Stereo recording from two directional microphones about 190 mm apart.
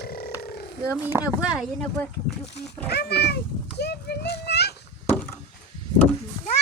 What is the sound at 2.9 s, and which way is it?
A child's voice, 60° left (ahead or behind).